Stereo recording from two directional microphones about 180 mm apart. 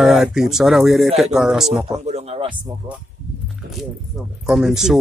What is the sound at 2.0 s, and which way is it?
Speech, 35° right (ahead or behind).